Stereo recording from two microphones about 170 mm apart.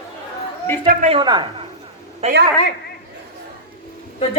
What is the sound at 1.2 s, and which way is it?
Speech, 25° right (ahead or behind).